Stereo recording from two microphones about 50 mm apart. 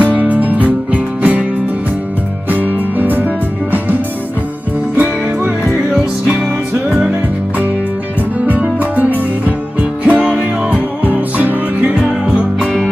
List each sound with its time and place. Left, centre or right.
0.1 s music: right
2.5 s music: right
4.9 s music: right
5.9 s music: centre
8.5 s music: right